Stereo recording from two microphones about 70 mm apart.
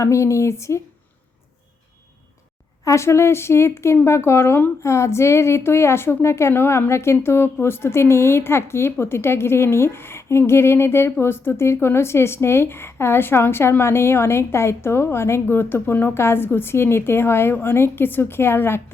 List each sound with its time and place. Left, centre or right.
0.0 s speech: left
2.8 s a woman's voice: left